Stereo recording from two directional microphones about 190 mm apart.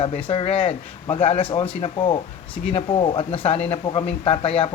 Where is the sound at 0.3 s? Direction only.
30° left (ahead or behind).